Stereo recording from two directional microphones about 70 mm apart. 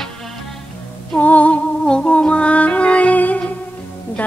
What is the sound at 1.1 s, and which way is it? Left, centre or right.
Music, left.